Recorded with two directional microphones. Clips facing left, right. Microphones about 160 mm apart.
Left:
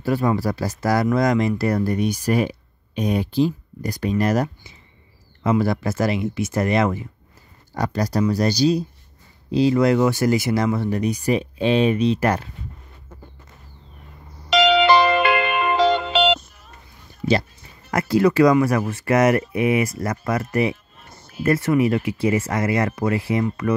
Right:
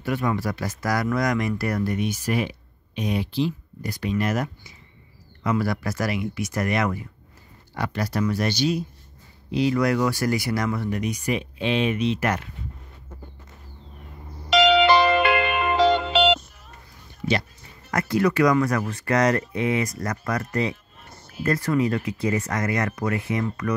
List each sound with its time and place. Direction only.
0.0 s speech: 35° left (ahead or behind)
7.7 s speech: 40° left (ahead or behind)
14.8 s music: 90° left
17.2 s speech: 20° left (ahead or behind)
19.3 s speech: 15° left (ahead or behind)
19.8 s speech: 25° left (ahead or behind)